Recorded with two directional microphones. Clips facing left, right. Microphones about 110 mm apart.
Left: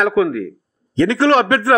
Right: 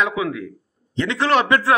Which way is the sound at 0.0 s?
45° left (ahead or behind).